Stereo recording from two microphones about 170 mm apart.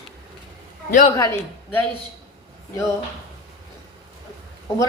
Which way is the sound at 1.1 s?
15° left (ahead or behind).